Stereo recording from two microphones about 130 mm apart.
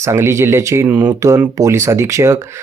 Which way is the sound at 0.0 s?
20° right (ahead or behind).